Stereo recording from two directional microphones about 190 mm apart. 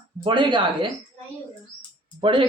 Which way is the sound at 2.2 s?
25° right (ahead or behind).